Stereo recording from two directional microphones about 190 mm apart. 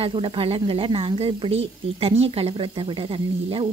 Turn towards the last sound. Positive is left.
turn(degrees=-30)  # may be behind; listen again after turning